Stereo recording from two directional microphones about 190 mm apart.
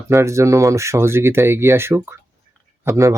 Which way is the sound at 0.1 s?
15° right (ahead or behind).